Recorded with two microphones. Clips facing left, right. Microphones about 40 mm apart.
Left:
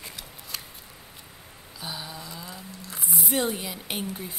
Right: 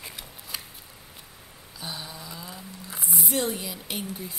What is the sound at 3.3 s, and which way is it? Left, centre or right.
Speech, centre.